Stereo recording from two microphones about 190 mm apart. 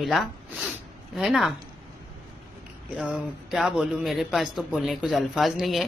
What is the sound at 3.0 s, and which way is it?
Speech, centre (ahead or behind).